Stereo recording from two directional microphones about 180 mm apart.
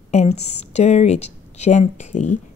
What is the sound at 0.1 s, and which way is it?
A woman's voice, 40° left (ahead or behind).